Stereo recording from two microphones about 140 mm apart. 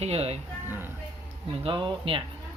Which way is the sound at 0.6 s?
15° right (ahead or behind).